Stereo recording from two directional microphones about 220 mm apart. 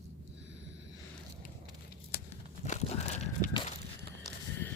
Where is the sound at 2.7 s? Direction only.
30° left (ahead or behind).